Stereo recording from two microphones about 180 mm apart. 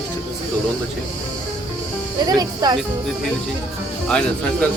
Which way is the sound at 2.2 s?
20° right (ahead or behind).